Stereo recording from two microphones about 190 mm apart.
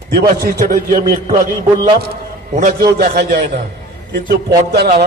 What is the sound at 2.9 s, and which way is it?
A man's voice, 50° right (ahead or behind).